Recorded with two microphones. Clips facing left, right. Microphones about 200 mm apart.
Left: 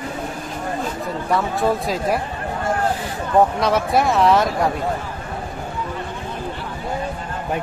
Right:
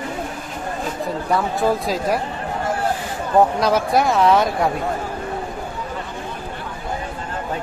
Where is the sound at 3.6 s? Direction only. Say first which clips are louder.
Right 1 dB; centre (ahead or behind).